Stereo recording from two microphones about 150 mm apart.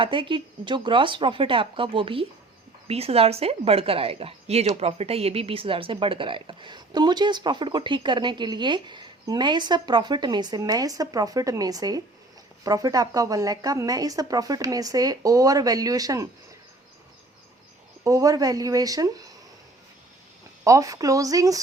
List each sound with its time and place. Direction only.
0.0 s a woman's voice: 35° right (ahead or behind)
18.0 s speech: 25° right (ahead or behind)
20.7 s speech: 20° right (ahead or behind)